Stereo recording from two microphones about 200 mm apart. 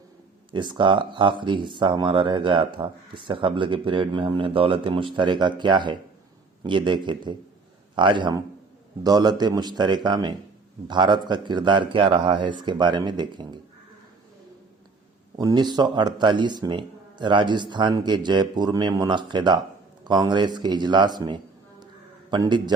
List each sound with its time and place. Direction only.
0.5 s speech: 25° right (ahead or behind)
15.4 s a man's voice: 20° right (ahead or behind)